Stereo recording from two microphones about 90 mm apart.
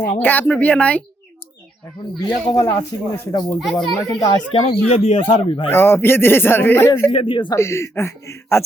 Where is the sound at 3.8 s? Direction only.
50° left (ahead or behind).